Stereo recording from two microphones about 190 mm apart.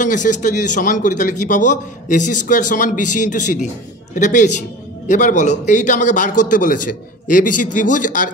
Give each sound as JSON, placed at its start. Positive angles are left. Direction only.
{"t": 0.0, "sound": "a man's voice", "side_deg": 40}